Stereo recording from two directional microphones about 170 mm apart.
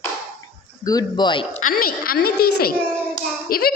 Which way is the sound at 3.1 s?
60° left (ahead or behind).